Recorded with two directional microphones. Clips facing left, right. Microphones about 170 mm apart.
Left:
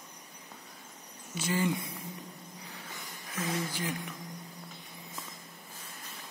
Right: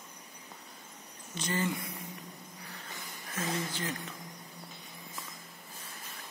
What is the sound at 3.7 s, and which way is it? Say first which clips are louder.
Speech: left 1 dB; 10° left (ahead or behind).